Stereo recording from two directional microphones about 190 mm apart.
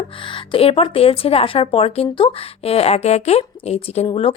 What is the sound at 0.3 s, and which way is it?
Speech, 25° left (ahead or behind).